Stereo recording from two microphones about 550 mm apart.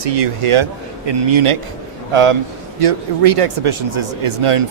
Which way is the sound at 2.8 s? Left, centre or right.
Right.